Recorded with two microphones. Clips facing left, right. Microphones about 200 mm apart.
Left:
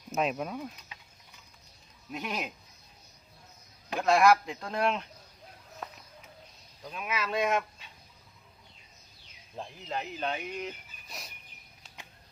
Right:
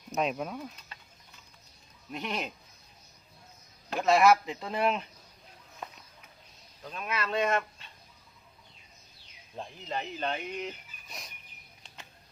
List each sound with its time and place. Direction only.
0.1 s speech: centre (ahead or behind)
2.1 s speech: 5° left (ahead or behind)
3.9 s speech: centre (ahead or behind)
6.8 s speech: 5° left (ahead or behind)
9.6 s speech: centre (ahead or behind)